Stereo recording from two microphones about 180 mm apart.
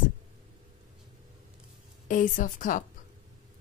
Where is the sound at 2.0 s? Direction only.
50° left (ahead or behind).